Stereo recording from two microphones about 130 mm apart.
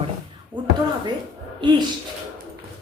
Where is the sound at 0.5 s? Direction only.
35° right (ahead or behind).